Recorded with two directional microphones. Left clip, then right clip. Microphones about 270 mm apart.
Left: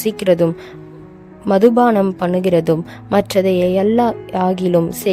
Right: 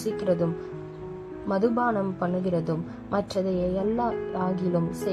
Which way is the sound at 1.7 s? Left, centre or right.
Left.